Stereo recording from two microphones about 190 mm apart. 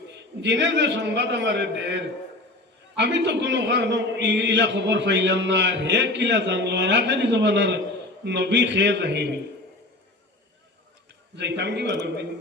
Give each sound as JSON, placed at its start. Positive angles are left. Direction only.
{"t": 0.4, "sound": "a man's voice", "side_deg": -65}
{"t": 11.3, "sound": "a man's voice", "side_deg": -65}